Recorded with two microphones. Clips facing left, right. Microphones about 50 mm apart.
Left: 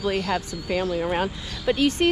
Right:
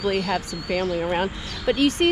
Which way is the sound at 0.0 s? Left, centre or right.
Right.